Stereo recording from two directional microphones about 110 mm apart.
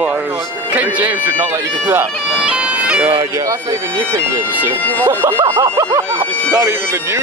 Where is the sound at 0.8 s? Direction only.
15° right (ahead or behind).